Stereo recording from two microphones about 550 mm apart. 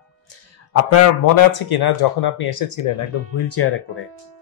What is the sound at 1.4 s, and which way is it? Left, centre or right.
Speech, left.